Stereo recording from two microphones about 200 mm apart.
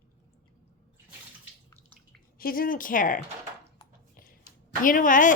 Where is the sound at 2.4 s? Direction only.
45° left (ahead or behind).